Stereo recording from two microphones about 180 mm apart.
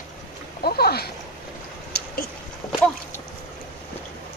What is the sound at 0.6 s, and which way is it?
Speech, 60° left (ahead or behind).